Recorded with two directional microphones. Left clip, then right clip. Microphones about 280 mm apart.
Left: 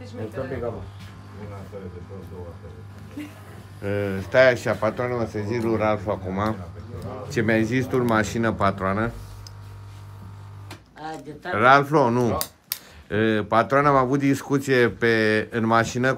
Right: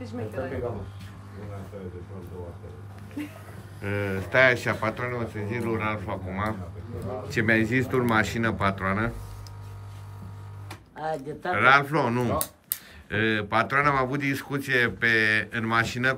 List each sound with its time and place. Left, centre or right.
3.8 s speech: centre
11.0 s a sound: right
11.5 s speech: centre